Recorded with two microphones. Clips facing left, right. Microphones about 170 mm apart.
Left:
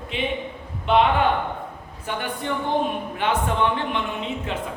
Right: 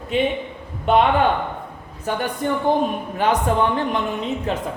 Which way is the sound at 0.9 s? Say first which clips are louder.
Right 2 dB; 45° right (ahead or behind).